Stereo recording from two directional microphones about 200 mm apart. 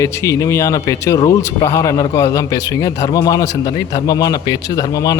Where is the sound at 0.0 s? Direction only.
15° left (ahead or behind).